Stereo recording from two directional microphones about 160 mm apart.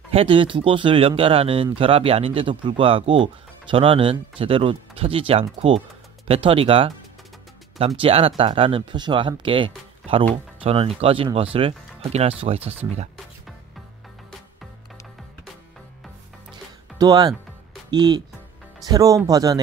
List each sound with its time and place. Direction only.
0.1 s speech: 35° right (ahead or behind)
17.0 s speech: 25° right (ahead or behind)
18.9 s speech: 20° right (ahead or behind)